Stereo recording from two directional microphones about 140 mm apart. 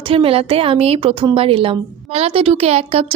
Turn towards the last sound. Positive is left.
turn(degrees=-45)  # may be behind; listen again after turning